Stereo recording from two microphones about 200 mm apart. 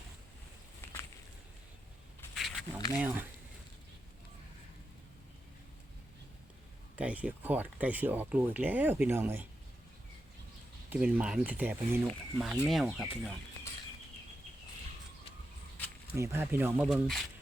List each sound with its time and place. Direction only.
2.3 s a sound: centre (ahead or behind)
3.0 s speech: 10° right (ahead or behind)
6.9 s speech: 5° right (ahead or behind)
10.8 s speech: 10° right (ahead or behind)
16.1 s speech: 15° right (ahead or behind)